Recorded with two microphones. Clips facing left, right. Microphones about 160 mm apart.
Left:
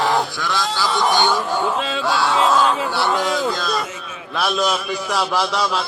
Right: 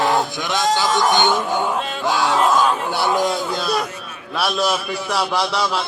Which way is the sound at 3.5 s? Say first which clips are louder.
Right 2 dB; 10° right (ahead or behind).